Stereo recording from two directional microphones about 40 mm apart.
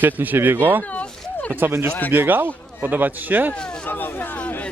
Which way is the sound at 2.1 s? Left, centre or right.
Right.